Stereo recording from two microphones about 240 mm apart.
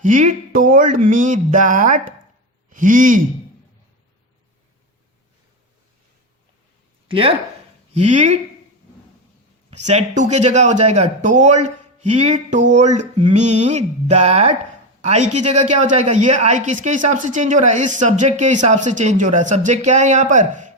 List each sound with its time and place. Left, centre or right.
0.0 s speech: right
7.1 s a woman's voice: right
9.6 s a woman's voice: right